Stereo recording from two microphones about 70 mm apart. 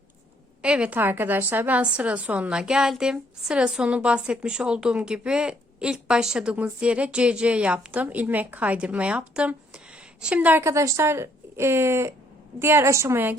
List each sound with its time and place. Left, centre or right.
0.6 s a woman's voice: centre
0.9 s a woman's voice: right
10.6 s speech: right